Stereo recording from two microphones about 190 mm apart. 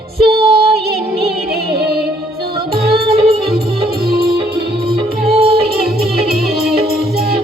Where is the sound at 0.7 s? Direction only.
55° right (ahead or behind).